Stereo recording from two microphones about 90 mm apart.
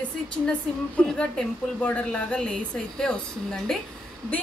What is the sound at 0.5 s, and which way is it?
A woman's voice, 10° left (ahead or behind).